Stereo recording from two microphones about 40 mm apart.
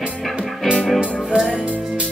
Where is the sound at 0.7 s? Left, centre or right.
Centre.